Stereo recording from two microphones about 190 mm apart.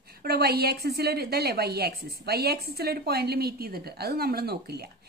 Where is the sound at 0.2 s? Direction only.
55° right (ahead or behind).